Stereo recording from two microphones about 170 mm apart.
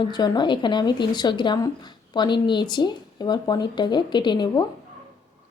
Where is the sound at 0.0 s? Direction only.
25° left (ahead or behind).